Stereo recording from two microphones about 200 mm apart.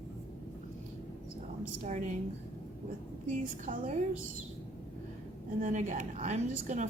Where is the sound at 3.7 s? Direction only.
40° right (ahead or behind).